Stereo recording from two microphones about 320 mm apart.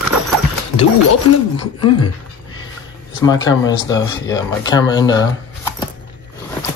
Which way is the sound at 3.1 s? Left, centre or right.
Centre.